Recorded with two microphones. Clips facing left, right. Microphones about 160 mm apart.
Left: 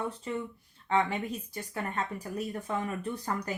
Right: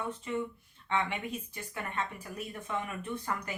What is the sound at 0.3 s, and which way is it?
Speech, 35° left (ahead or behind).